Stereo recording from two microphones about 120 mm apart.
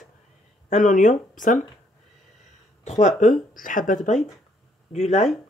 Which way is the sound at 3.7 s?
90° left.